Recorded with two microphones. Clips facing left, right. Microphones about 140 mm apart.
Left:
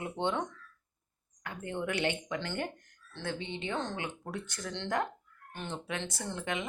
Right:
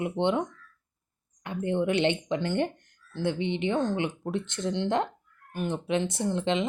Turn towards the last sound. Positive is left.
turn(degrees=-20)  # may be behind; listen again after turning